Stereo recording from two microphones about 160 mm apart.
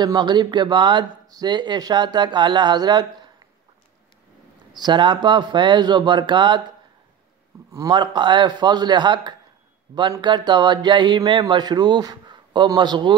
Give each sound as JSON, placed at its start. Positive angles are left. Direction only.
{"t": 0.0, "sound": "speech", "side_deg": -25}
{"t": 4.7, "sound": "speech", "side_deg": -25}
{"t": 7.7, "sound": "speech", "side_deg": -25}